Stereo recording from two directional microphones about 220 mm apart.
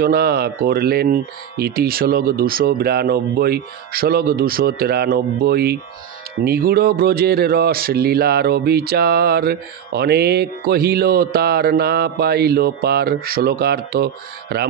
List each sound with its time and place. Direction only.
0.0 s speech: 45° right (ahead or behind)